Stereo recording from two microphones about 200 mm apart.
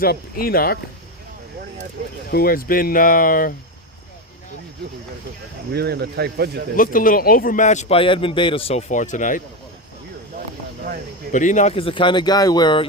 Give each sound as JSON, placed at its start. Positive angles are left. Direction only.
{"t": 0.0, "sound": "speech", "side_deg": 50}
{"t": 2.3, "sound": "speech", "side_deg": 50}
{"t": 5.7, "sound": "speech", "side_deg": -55}
{"t": 6.7, "sound": "a man's voice", "side_deg": 45}
{"t": 11.3, "sound": "speech", "side_deg": 40}